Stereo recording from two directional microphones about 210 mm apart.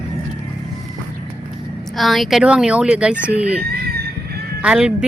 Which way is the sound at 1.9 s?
Centre (ahead or behind).